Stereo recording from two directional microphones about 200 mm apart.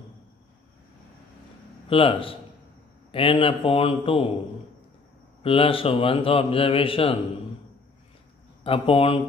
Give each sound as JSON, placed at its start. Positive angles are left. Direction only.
{"t": 1.9, "sound": "a man's voice", "side_deg": 25}
{"t": 5.4, "sound": "a man's voice", "side_deg": 25}
{"t": 8.6, "sound": "a man's voice", "side_deg": 30}